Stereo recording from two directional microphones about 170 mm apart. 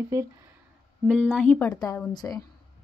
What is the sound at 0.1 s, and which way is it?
Speech, 20° right (ahead or behind).